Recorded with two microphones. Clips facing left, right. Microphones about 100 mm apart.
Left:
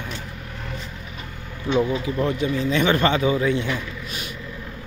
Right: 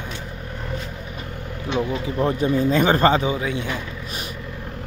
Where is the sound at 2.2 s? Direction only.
35° right (ahead or behind).